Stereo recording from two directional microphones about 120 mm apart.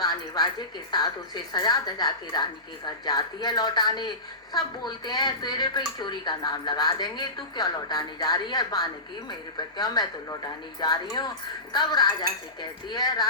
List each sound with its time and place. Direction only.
0.0 s speech: 35° left (ahead or behind)